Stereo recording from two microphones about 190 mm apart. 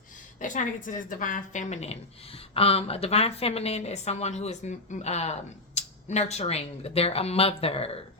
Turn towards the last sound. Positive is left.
turn(degrees=30)  # may be behind; listen again after turning